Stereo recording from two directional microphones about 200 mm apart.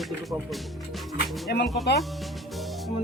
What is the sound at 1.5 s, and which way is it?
Speech, 55° left (ahead or behind).